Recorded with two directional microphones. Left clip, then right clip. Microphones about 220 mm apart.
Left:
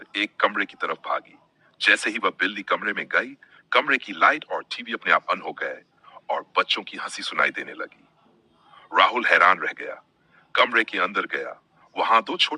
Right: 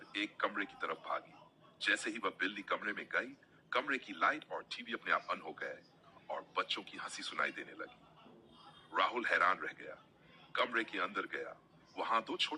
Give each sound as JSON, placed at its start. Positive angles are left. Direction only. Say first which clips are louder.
{"t": 0.0, "sound": "a man's voice", "louder": "left 15 dB", "side_deg": 45}
{"t": 8.9, "sound": "a man's voice", "louder": "left 16 dB", "side_deg": 45}